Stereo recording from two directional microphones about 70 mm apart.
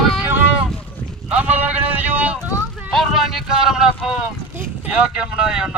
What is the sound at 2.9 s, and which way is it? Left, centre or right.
Speech, centre.